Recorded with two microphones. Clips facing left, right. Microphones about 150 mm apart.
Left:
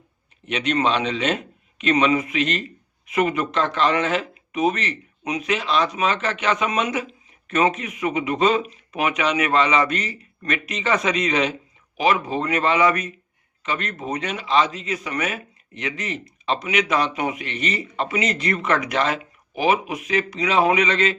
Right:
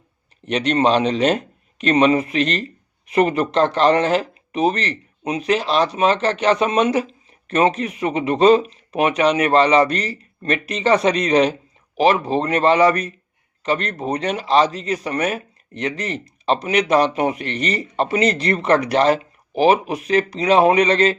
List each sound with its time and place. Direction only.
0.4 s speech: 35° right (ahead or behind)